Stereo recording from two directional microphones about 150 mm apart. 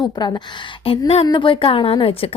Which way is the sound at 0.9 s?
40° left (ahead or behind).